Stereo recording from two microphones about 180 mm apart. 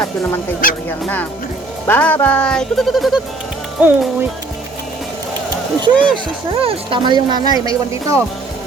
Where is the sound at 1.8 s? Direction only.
10° left (ahead or behind).